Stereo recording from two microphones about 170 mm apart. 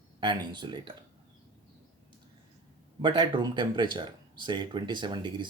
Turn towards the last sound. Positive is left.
turn(degrees=-25)  # may be behind; listen again after turning